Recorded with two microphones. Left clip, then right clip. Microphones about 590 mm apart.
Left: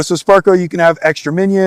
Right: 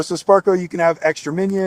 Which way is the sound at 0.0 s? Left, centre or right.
Left.